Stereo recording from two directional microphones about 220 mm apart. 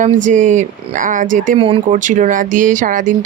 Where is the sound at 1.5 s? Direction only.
25° right (ahead or behind).